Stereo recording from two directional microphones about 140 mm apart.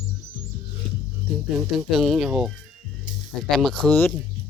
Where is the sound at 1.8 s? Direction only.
Centre (ahead or behind).